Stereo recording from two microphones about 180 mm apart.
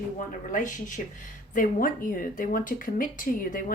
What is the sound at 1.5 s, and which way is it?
A woman's voice, 50° left (ahead or behind).